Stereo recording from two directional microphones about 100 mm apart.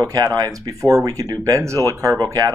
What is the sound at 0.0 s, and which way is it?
Speech, 40° right (ahead or behind).